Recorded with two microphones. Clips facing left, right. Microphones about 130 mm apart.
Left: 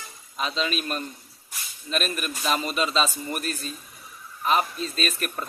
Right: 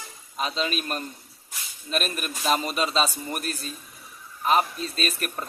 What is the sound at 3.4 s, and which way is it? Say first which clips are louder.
Speech: left 1 dB; 40° left (ahead or behind).